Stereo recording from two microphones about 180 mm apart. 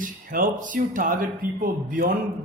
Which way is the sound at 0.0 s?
50° right (ahead or behind).